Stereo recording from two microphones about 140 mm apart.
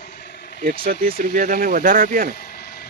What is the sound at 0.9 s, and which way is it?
Speech, 90° right.